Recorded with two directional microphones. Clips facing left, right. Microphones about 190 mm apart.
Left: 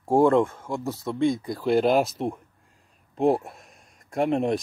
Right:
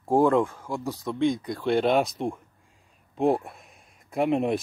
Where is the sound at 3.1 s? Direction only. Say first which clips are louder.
Left 1 dB; centre (ahead or behind).